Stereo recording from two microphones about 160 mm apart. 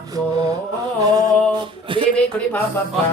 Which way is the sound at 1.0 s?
25° right (ahead or behind).